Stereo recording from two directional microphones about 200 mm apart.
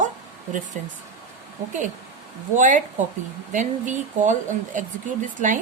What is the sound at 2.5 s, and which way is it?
Speech, 40° right (ahead or behind).